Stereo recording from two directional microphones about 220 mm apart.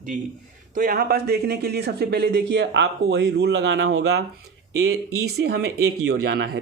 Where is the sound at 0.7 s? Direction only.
40° right (ahead or behind).